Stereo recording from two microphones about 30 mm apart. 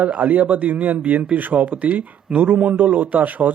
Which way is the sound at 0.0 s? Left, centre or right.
Right.